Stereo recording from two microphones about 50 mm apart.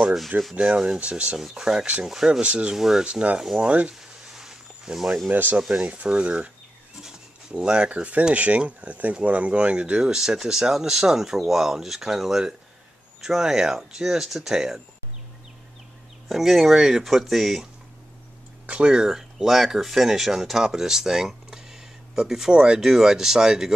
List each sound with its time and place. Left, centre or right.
0.0 s speech: centre
0.6 s speech: centre
1.4 s speech: centre
2.4 s speech: right
2.7 s speech: centre
3.1 s speech: right
3.9 s a sound: centre
5.3 s speech: right; by 14.8 s centre
16.3 s speech: centre
18.7 s speech: centre